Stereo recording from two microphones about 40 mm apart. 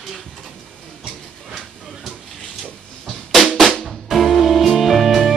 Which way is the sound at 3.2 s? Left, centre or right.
Centre.